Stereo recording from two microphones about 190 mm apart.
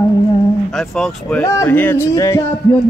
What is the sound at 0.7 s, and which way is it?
Speech, centre (ahead or behind).